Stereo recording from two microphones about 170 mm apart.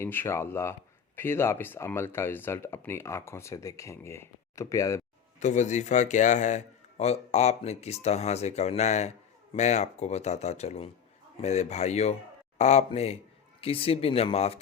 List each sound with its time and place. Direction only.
0.0 s speech: 15° left (ahead or behind)
5.4 s a man's voice: 45° left (ahead or behind)